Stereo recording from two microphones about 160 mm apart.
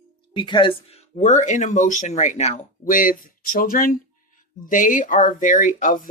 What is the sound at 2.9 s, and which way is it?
Speech, 60° left (ahead or behind).